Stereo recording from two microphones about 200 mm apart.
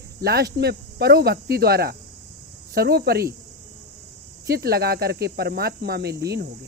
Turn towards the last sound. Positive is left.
turn(degrees=-50)  # may be behind; listen again after turning